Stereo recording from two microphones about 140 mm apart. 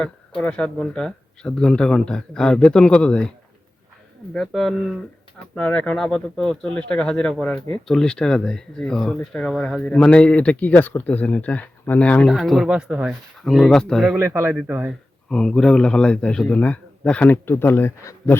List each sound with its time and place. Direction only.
0.0 s speech: 5° left (ahead or behind)
4.4 s speech: centre (ahead or behind)
14.2 s speech: 20° right (ahead or behind)
15.3 s speech: 5° left (ahead or behind)